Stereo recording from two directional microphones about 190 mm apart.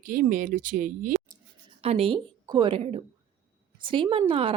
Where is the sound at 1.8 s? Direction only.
30° right (ahead or behind).